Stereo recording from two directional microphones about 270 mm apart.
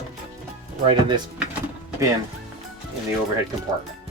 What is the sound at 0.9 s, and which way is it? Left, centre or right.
Speech, centre.